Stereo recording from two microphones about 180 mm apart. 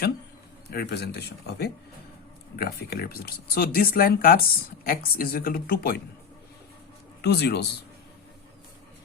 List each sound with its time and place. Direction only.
0.7 s speech: 65° left (ahead or behind)
7.2 s speech: 65° left (ahead or behind)